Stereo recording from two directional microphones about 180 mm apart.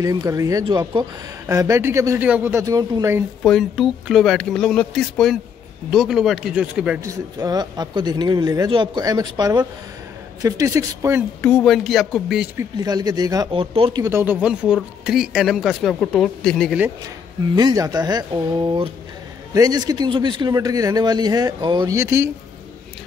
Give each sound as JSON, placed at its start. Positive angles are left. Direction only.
{"t": 0.0, "sound": "a man's voice", "side_deg": -20}
{"t": 3.4, "sound": "speech", "side_deg": 0}
{"t": 7.0, "sound": "a man's voice", "side_deg": -20}
{"t": 11.4, "sound": "speech", "side_deg": 5}
{"t": 12.5, "sound": "a man's voice", "side_deg": -20}
{"t": 14.0, "sound": "speech", "side_deg": -15}
{"t": 17.6, "sound": "a man's voice", "side_deg": -20}